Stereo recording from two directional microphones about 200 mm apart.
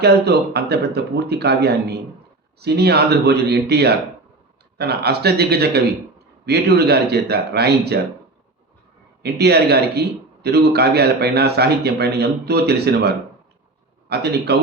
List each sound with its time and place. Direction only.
0.0 s a man's voice: 55° right (ahead or behind)
9.2 s a man's voice: 55° right (ahead or behind)